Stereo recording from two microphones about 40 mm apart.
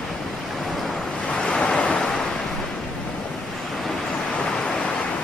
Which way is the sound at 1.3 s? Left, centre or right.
Left.